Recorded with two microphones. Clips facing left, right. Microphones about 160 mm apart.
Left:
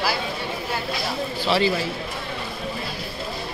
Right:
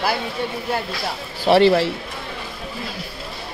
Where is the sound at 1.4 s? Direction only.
60° right (ahead or behind).